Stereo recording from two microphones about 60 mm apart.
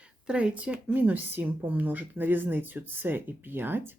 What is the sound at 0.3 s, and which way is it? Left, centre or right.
Speech, centre.